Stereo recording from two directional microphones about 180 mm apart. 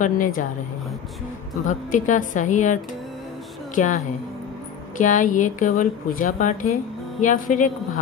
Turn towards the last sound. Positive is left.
turn(degrees=45)  # may be behind; listen again after turning